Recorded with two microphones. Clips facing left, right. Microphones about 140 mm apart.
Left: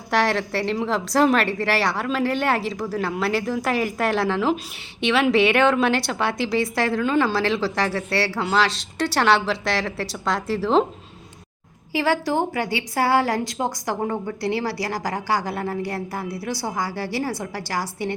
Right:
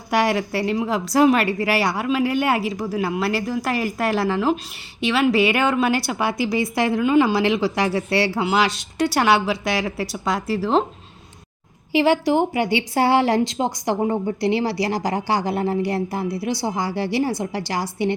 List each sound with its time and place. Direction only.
0.1 s a woman's voice: 10° right (ahead or behind)
11.9 s a woman's voice: 20° right (ahead or behind)